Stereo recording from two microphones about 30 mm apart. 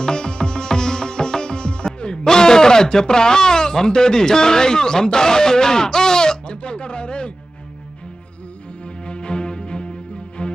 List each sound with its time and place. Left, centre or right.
0.0 s music: left
2.2 s speech: left
6.5 s speech: left
9.0 s music: left